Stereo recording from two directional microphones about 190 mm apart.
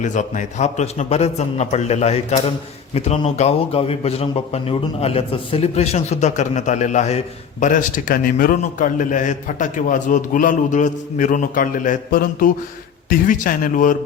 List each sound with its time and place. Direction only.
0.0 s a man's voice: 40° left (ahead or behind)